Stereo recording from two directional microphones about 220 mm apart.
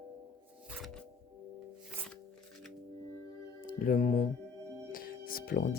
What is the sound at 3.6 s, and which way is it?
Speech, 40° left (ahead or behind).